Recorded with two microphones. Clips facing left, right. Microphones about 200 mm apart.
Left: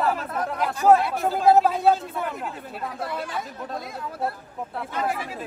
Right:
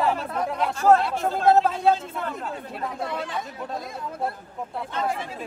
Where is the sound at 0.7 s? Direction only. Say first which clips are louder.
Left 1 dB; 15° left (ahead or behind).